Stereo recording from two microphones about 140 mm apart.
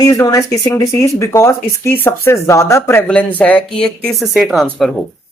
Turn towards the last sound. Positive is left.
turn(degrees=0)  # may be behind; listen again after turning